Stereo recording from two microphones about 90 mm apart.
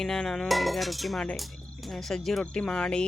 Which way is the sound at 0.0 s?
5° left (ahead or behind).